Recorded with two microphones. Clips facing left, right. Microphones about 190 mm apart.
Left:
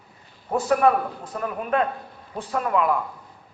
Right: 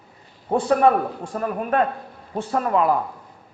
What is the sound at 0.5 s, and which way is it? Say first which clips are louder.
A man's voice: right 2 dB; 30° right (ahead or behind).